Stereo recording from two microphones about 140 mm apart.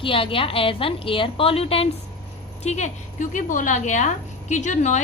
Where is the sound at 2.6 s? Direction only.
55° left (ahead or behind).